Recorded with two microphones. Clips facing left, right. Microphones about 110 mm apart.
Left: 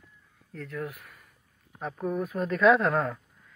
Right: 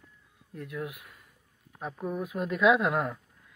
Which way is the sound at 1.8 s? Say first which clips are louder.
Left 3 dB; 5° right (ahead or behind).